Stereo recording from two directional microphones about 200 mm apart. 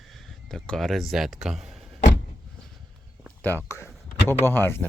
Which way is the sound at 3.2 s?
10° left (ahead or behind).